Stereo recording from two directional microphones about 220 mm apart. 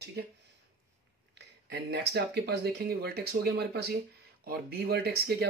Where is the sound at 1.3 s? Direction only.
50° right (ahead or behind).